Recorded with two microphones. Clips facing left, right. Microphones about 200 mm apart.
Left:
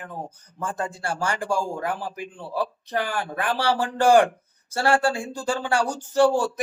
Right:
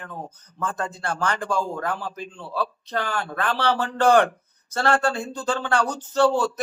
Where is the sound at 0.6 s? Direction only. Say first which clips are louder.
Even; 10° left (ahead or behind).